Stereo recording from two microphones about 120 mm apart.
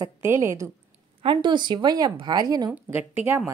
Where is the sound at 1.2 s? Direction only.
40° right (ahead or behind).